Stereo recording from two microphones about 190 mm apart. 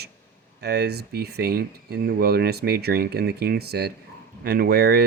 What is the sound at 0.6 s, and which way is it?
Speech, 60° right (ahead or behind).